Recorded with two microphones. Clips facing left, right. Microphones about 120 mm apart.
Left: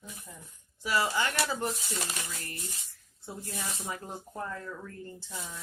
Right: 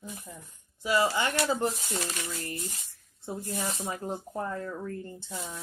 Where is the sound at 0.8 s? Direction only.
20° right (ahead or behind).